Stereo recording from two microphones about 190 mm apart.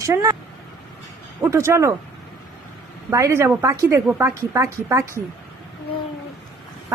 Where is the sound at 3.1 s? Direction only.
15° right (ahead or behind).